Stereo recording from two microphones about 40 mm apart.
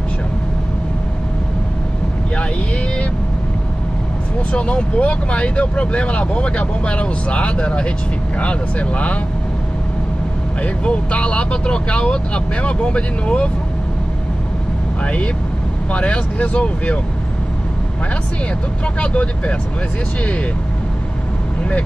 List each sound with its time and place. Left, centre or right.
4.5 s speech: left
10.6 s speech: left
15.9 s speech: left
18.9 s speech: left